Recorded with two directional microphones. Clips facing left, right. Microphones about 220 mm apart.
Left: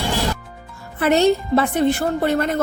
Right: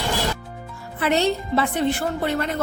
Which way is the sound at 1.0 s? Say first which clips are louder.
Left 5 dB; 45° left (ahead or behind).